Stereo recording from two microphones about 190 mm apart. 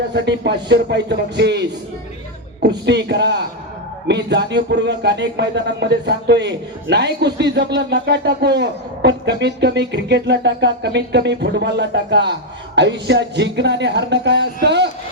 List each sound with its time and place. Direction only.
0.1 s speech: 60° right (ahead or behind)